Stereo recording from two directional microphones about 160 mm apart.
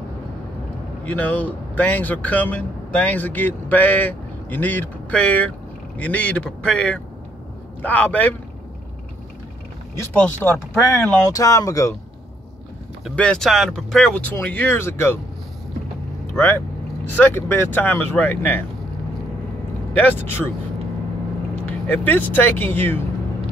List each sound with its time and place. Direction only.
1.0 s speech: 10° left (ahead or behind)
9.9 s speech: 15° left (ahead or behind)
13.0 s speech: 5° left (ahead or behind)
16.3 s speech: 15° left (ahead or behind)
19.9 s speech: 10° left (ahead or behind)
21.6 s speech: 10° left (ahead or behind)